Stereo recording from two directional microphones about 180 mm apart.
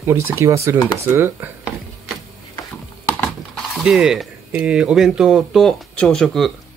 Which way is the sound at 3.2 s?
Centre (ahead or behind).